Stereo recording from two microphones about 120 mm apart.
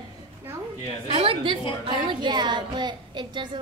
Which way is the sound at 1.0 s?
50° right (ahead or behind).